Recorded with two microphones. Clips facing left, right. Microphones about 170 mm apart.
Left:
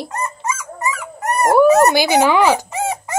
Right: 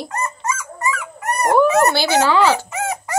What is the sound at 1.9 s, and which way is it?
Speech, 15° left (ahead or behind).